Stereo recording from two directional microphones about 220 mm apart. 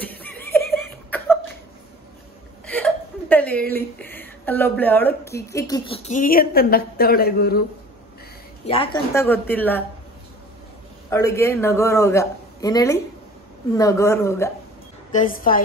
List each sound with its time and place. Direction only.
0.0 s laughter: 5° left (ahead or behind)
2.6 s whimper: 5° left (ahead or behind)
6.0 s speech: 35° left (ahead or behind)
8.6 s a woman's voice: 25° left (ahead or behind)
9.1 s a man's voice: 10° left (ahead or behind)
11.1 s a man's voice: 15° left (ahead or behind)
15.0 s a woman's voice: 35° left (ahead or behind)